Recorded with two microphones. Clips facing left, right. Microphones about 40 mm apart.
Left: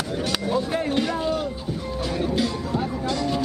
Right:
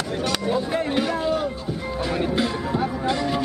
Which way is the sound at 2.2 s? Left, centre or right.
Right.